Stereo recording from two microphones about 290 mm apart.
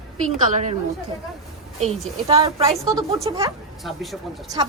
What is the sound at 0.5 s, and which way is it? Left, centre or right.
Speech, right.